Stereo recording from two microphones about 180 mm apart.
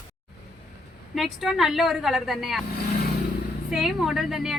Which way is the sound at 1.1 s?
Centre (ahead or behind).